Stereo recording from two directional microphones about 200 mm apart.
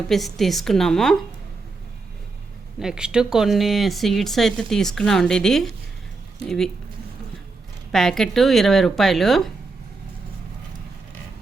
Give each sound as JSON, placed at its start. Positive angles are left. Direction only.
{"t": 0.1, "sound": "speech", "side_deg": 0}
{"t": 2.7, "sound": "speech", "side_deg": -5}
{"t": 7.9, "sound": "speech", "side_deg": 0}